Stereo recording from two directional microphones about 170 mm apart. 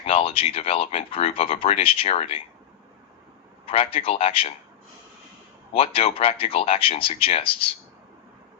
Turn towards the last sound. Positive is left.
turn(degrees=30)  # may be behind; listen again after turning